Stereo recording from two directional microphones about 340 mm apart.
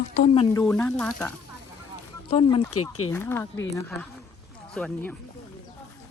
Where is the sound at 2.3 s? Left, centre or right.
Centre.